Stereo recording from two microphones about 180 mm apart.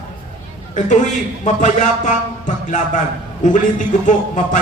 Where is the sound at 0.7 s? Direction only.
45° left (ahead or behind).